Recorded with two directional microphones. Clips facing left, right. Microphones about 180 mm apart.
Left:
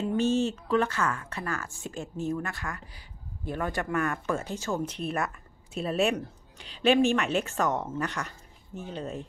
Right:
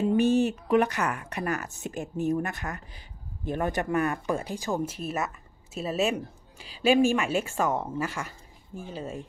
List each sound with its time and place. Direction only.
0.1 s speech: 15° right (ahead or behind)
4.9 s speech: 5° right (ahead or behind)